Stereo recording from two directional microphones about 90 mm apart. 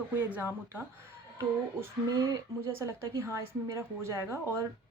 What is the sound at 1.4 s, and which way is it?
Speech, 35° right (ahead or behind).